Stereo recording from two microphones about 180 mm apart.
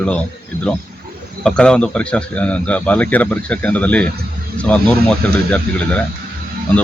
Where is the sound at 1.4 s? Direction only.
5° left (ahead or behind).